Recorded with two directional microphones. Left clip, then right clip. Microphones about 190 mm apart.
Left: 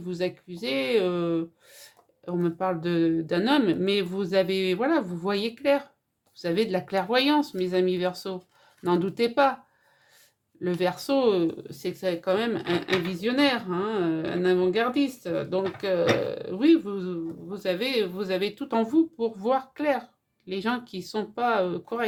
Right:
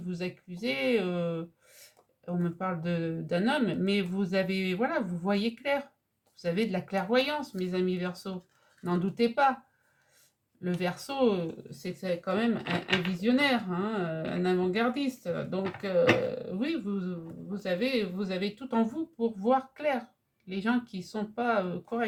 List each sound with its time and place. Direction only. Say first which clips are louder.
0.1 s speech: left 8 dB; 40° left (ahead or behind)
10.6 s speech: left 6 dB; 40° left (ahead or behind)